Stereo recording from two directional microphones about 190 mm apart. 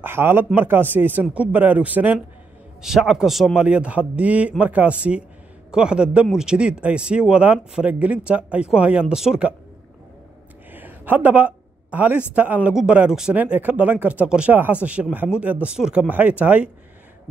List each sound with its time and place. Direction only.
0.0 s a man's voice: 10° right (ahead or behind)
10.7 s a sound: 10° right (ahead or behind)
12.4 s a man's voice: 10° right (ahead or behind)